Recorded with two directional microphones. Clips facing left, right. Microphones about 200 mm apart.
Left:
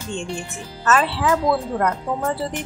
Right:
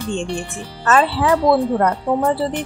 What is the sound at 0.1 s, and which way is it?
Speech, 30° right (ahead or behind).